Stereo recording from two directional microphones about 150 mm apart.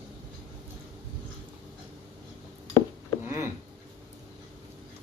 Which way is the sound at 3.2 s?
15° right (ahead or behind).